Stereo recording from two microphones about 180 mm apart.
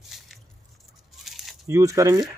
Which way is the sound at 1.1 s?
Centre (ahead or behind).